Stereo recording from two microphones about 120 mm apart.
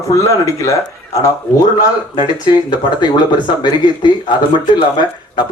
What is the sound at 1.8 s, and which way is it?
Speech, 40° left (ahead or behind).